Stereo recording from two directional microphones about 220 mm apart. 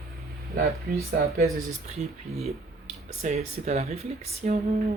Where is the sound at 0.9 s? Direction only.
45° right (ahead or behind).